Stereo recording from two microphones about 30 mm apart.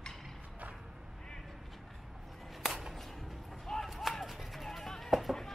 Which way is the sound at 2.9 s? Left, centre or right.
Centre.